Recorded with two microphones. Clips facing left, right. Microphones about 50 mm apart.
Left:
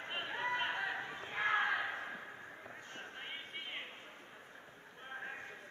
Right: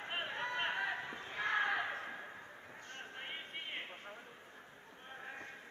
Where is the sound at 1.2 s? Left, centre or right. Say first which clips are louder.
Left 3 dB; left.